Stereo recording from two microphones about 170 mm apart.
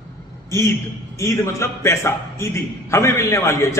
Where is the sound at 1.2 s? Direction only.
15° left (ahead or behind).